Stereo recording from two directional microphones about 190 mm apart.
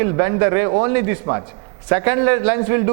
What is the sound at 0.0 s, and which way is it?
A man's voice, 15° right (ahead or behind).